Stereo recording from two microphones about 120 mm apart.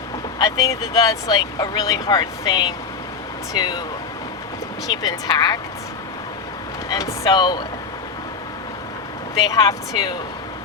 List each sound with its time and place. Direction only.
0.3 s speech: 30° left (ahead or behind)
5.0 s speech: 35° left (ahead or behind)
6.9 s speech: 30° left (ahead or behind)
9.5 s speech: 30° left (ahead or behind)